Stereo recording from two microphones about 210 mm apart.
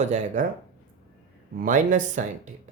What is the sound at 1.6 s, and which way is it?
Speech, 40° right (ahead or behind).